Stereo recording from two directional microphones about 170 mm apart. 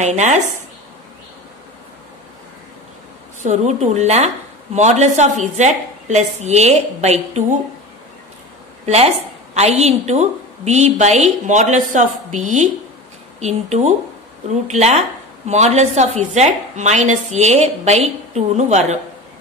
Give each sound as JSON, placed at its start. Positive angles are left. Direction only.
{"t": 0.0, "sound": "speech", "side_deg": -45}
{"t": 3.4, "sound": "a woman's voice", "side_deg": -45}
{"t": 8.8, "sound": "a woman's voice", "side_deg": -40}